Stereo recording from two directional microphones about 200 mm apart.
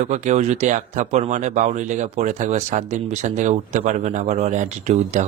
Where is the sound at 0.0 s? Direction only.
35° right (ahead or behind).